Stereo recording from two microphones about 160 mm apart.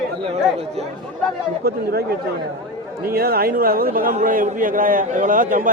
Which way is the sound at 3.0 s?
70° right (ahead or behind).